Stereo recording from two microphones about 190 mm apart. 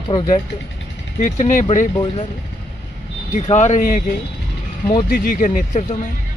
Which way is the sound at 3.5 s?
40° left (ahead or behind).